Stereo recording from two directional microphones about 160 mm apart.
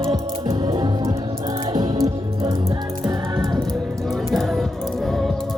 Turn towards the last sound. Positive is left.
turn(degrees=0)  # may be behind; listen again after turning